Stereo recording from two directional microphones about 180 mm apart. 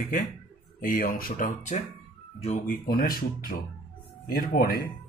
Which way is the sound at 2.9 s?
55° left (ahead or behind).